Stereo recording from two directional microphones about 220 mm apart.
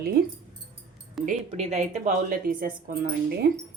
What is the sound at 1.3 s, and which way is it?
Speech, 30° right (ahead or behind).